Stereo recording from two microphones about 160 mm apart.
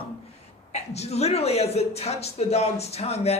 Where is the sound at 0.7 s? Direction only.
40° left (ahead or behind).